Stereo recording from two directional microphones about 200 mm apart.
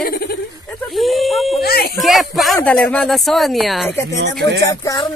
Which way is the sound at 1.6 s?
50° left (ahead or behind).